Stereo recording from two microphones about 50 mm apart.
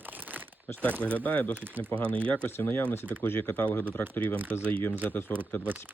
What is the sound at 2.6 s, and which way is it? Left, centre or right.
Speech, left.